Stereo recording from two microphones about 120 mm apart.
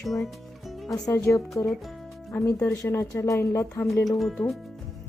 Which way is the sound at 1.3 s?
5° left (ahead or behind).